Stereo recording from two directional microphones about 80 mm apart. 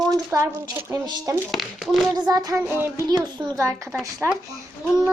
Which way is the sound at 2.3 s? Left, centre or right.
Right.